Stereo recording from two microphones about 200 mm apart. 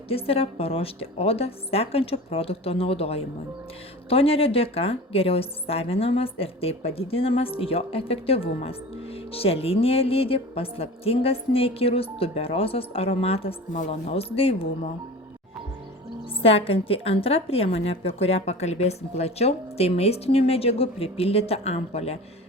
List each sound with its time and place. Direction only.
0.1 s a woman's voice: 30° left (ahead or behind)
16.4 s a woman's voice: 30° left (ahead or behind)